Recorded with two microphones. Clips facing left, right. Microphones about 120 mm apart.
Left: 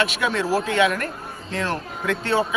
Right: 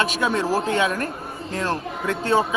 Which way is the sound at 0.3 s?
25° right (ahead or behind).